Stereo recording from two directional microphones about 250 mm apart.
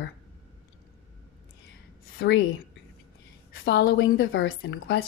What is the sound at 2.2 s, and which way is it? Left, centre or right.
Speech, left.